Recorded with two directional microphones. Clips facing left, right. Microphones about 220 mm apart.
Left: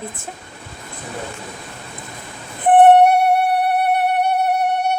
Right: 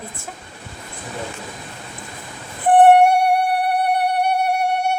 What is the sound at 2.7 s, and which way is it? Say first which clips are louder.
Music: left 1 dB; 20° left (ahead or behind).